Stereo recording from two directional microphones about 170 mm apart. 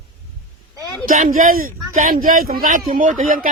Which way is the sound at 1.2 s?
55° right (ahead or behind).